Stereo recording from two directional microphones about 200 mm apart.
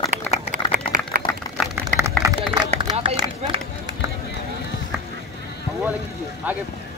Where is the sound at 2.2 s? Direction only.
20° right (ahead or behind).